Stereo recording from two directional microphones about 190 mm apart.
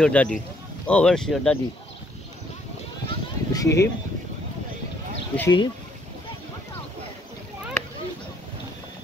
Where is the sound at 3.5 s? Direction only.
15° left (ahead or behind).